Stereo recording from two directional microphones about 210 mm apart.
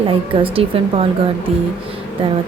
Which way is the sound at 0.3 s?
25° right (ahead or behind).